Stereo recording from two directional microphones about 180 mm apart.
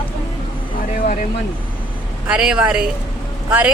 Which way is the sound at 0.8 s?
50° left (ahead or behind).